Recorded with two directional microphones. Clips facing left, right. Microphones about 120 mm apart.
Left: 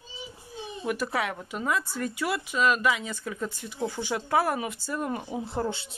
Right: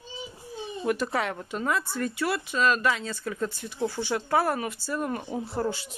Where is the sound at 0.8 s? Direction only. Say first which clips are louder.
Right 2 dB; 5° left (ahead or behind).